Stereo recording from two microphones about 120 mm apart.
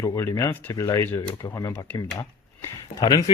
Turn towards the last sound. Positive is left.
turn(degrees=35)  # may be behind; listen again after turning